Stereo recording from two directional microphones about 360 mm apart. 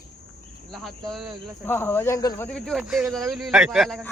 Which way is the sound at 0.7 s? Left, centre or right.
Centre.